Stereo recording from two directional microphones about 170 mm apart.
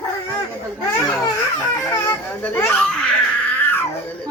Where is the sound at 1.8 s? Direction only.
20° left (ahead or behind).